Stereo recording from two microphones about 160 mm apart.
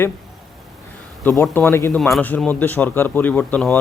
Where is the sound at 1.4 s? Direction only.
15° left (ahead or behind).